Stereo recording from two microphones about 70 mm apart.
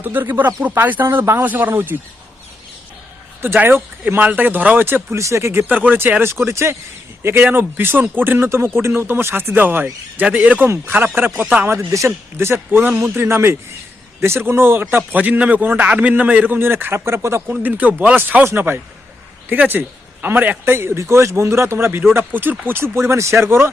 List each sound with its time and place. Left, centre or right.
0.0 s a man's voice: right
1.0 s speech: right
1.4 s a man's voice: right
3.4 s a man's voice: right
5.1 s speech: right
5.6 s a man's voice: right
6.4 s a man's voice: right
10.9 s a man's voice: right
17.5 s a man's voice: right
20.7 s speech: right